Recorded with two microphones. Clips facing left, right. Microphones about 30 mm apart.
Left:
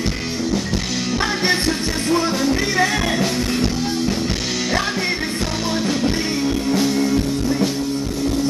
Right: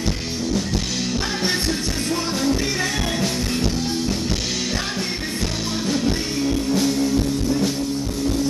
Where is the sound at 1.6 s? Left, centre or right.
Centre.